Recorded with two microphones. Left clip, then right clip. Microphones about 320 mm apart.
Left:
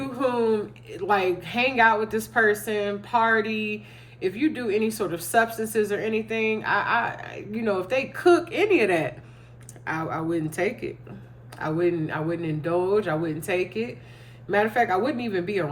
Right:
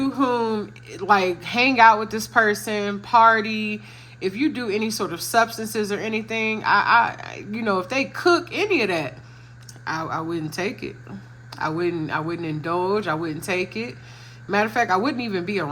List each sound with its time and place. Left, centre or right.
0.2 s speech: centre